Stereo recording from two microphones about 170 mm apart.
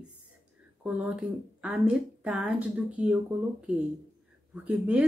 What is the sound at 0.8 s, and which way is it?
Speech, 5° right (ahead or behind).